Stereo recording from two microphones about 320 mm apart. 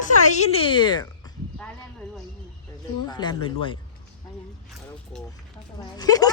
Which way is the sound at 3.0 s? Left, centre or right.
Centre.